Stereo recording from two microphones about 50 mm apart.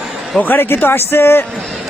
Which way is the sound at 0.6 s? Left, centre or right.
Left.